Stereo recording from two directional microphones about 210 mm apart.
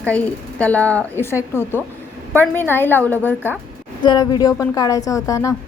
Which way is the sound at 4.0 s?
20° left (ahead or behind).